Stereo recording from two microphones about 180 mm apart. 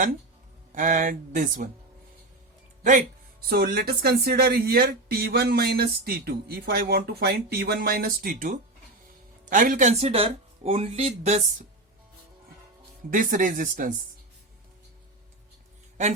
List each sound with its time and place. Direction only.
0.7 s speech: 45° right (ahead or behind)
3.5 s speech: 60° right (ahead or behind); by 10.1 s 45° right (ahead or behind)
10.1 s speech: 30° right (ahead or behind)
13.1 s speech: 50° right (ahead or behind)